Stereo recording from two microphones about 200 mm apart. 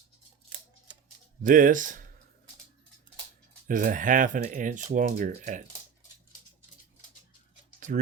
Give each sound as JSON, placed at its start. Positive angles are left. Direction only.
{"t": 1.4, "sound": "speech", "side_deg": -40}
{"t": 3.7, "sound": "speech", "side_deg": -40}